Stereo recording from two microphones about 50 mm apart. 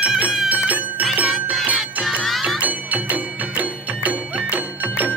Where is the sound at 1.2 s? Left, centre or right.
Centre.